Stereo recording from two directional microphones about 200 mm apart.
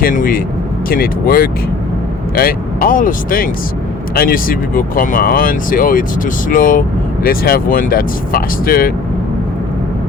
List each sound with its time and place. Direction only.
0.0 s speech: 45° left (ahead or behind)